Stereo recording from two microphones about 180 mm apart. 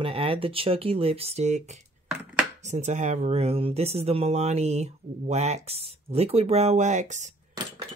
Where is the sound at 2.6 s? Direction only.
40° right (ahead or behind).